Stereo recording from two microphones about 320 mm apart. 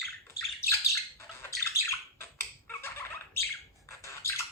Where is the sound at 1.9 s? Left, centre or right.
Centre.